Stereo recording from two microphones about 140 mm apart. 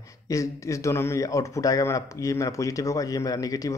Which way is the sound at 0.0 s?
25° left (ahead or behind).